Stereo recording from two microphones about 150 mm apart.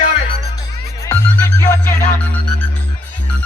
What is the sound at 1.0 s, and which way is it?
Music, 15° left (ahead or behind).